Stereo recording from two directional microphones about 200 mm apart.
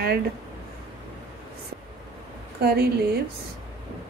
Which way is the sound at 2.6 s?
50° right (ahead or behind).